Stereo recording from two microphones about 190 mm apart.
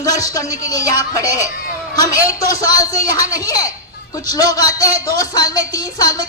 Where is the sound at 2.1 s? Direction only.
15° left (ahead or behind).